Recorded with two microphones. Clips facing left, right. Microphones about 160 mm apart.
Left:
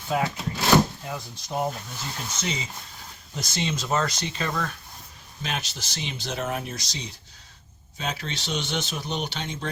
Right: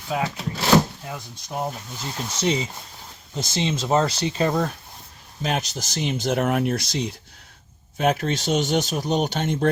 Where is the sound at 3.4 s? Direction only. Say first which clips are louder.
Right 4 dB; 25° right (ahead or behind).